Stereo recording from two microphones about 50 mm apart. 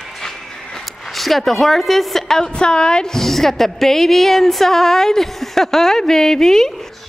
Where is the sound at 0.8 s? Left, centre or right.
Centre.